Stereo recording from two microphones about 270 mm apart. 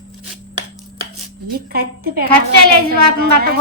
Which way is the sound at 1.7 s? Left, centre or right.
Right.